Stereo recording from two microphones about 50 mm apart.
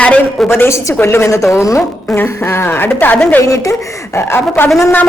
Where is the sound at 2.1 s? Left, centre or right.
Left.